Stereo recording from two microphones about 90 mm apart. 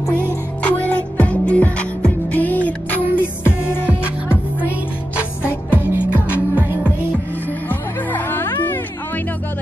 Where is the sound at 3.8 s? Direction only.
15° right (ahead or behind).